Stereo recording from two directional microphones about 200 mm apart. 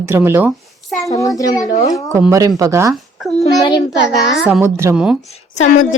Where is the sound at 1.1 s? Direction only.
15° left (ahead or behind).